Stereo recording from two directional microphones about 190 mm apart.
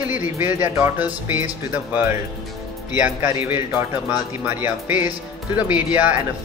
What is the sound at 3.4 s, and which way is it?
Speech, 10° right (ahead or behind).